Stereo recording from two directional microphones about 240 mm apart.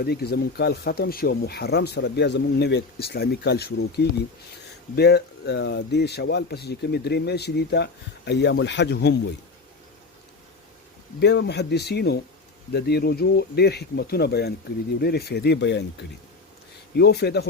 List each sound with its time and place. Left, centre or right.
0.0 s a man's voice: left
11.2 s a man's voice: left